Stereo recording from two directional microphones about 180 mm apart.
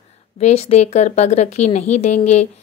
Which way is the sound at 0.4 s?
35° left (ahead or behind).